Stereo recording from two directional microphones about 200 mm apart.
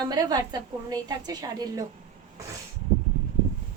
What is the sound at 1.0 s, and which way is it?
Speech, 20° right (ahead or behind).